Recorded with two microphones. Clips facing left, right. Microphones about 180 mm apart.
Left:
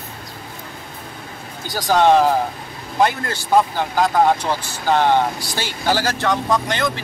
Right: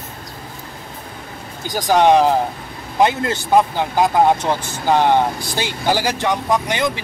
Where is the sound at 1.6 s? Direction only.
15° right (ahead or behind).